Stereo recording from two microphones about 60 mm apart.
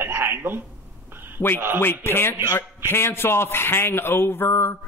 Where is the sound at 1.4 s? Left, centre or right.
Left.